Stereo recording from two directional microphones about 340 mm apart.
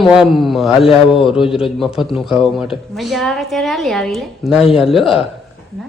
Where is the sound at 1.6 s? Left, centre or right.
Centre.